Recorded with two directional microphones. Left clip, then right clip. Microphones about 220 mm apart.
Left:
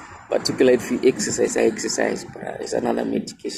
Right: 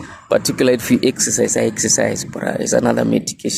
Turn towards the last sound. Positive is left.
turn(degrees=-55)  # may be behind; listen again after turning